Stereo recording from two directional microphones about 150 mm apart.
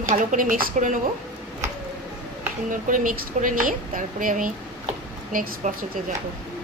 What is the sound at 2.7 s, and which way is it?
A woman's voice, 60° right (ahead or behind).